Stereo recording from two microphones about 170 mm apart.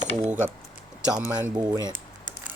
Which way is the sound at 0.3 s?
10° right (ahead or behind).